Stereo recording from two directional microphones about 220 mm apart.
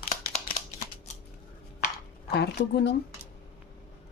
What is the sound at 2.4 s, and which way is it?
Speech, 50° left (ahead or behind).